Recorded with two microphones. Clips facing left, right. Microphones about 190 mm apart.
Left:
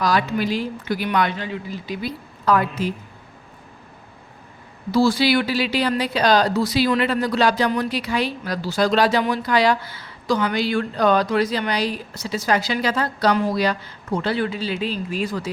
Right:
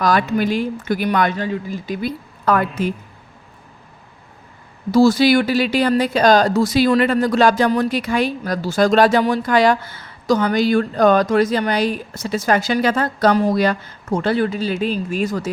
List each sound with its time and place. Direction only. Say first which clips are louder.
0.0 s speech: right 3 dB; 50° right (ahead or behind)
4.9 s speech: right 5 dB; 45° right (ahead or behind)